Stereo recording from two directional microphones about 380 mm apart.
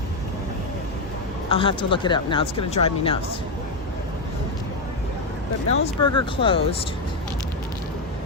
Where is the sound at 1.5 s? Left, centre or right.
Centre.